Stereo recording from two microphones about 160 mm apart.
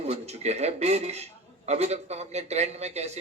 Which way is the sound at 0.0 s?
40° right (ahead or behind).